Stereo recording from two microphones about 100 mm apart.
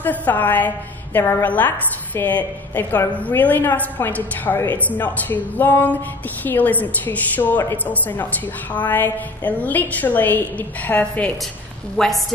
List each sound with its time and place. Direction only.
0.0 s a woman's voice: 15° left (ahead or behind)